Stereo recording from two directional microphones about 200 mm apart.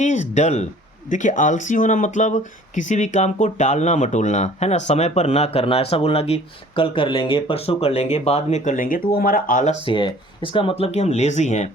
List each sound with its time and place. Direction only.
0.0 s speech: 35° left (ahead or behind)
9.8 s speech: 25° left (ahead or behind)